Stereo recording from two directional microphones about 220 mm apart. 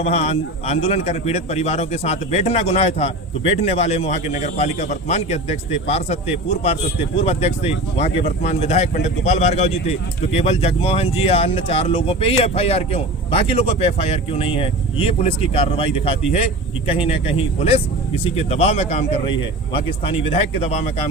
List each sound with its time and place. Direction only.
0.0 s speech: 30° left (ahead or behind)
20.3 s speech: 30° left (ahead or behind)